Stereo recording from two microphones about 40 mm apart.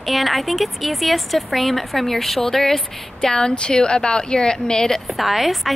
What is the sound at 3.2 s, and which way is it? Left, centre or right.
A woman's voice, centre.